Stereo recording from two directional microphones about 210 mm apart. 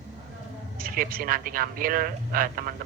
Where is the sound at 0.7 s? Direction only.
45° right (ahead or behind).